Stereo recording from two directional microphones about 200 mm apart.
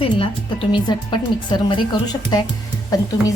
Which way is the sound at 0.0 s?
25° left (ahead or behind).